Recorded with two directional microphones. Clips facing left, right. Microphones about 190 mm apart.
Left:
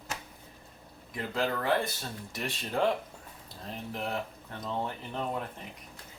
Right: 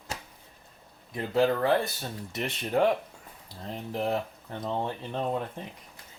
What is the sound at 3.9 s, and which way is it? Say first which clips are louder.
Speech: right 6 dB; 35° right (ahead or behind).